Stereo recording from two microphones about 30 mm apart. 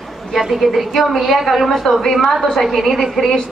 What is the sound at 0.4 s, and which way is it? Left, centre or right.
A woman's voice, centre.